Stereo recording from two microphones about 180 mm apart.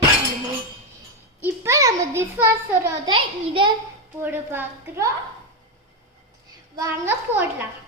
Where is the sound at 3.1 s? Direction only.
30° right (ahead or behind).